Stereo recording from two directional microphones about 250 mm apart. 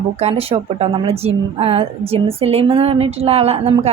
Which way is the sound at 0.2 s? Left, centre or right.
Right.